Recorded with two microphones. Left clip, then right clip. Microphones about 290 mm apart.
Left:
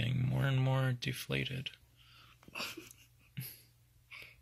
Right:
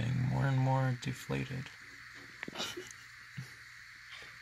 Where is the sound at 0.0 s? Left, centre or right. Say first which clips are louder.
Right 1 dB; centre.